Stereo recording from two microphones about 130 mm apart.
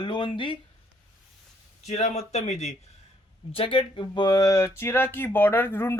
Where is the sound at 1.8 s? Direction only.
60° left (ahead or behind).